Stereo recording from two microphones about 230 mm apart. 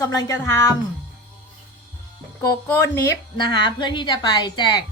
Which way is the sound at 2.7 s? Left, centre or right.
Centre.